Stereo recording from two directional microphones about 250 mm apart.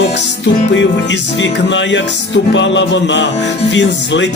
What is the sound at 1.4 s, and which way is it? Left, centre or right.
Music, left.